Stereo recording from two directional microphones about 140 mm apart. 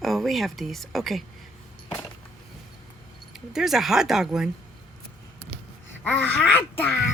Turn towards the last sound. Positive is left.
turn(degrees=10)  # may be behind; listen again after turning